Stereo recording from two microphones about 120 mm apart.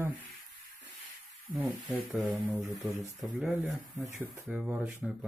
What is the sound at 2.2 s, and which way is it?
Speech, 10° right (ahead or behind).